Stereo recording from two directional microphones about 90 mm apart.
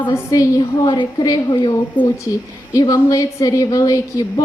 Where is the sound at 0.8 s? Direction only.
55° left (ahead or behind).